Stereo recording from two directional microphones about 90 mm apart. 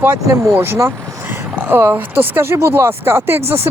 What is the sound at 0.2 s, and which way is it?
Speech, 35° right (ahead or behind).